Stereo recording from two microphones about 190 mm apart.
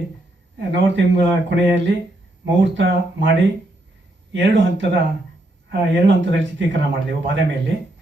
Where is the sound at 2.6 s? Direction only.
70° right (ahead or behind).